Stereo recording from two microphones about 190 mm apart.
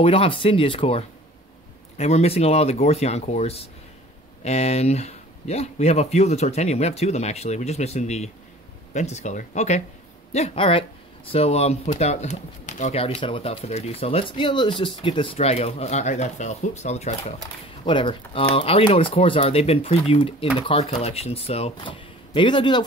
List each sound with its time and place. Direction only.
0.0 s speech: 30° left (ahead or behind)